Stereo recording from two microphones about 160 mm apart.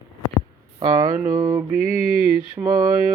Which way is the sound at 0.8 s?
25° right (ahead or behind).